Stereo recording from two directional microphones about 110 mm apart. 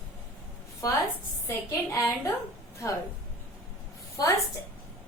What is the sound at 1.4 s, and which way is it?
Speech, 25° left (ahead or behind).